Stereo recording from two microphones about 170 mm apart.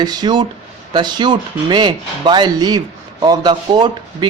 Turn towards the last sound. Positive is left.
turn(degrees=-25)  # may be behind; listen again after turning